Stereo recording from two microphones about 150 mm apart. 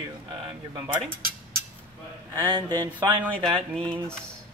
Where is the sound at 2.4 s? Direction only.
25° right (ahead or behind).